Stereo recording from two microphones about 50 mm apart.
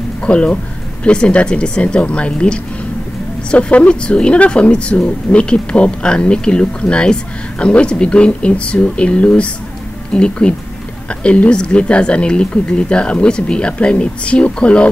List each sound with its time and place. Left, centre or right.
0.2 s speech: left